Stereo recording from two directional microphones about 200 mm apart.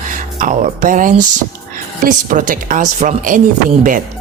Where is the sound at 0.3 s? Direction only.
40° right (ahead or behind).